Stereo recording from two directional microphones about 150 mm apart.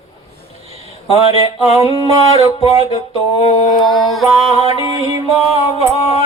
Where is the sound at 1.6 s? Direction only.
45° left (ahead or behind).